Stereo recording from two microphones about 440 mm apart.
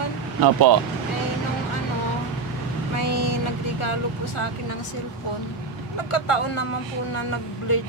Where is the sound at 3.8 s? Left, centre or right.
Left.